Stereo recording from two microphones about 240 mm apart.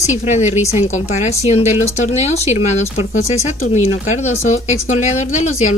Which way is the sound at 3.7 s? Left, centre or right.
Left.